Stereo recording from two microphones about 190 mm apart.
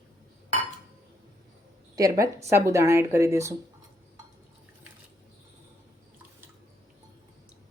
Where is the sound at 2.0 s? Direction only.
15° right (ahead or behind).